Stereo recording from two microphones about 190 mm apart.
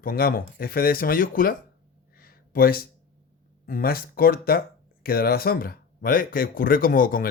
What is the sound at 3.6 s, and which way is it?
Speech, 50° left (ahead or behind).